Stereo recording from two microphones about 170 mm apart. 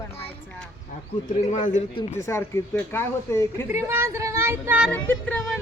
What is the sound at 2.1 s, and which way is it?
Speech, 15° left (ahead or behind).